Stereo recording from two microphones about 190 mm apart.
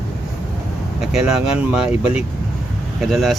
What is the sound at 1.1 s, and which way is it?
Speech, 5° right (ahead or behind).